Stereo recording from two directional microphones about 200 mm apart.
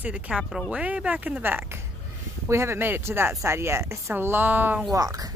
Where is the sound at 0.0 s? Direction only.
5° right (ahead or behind).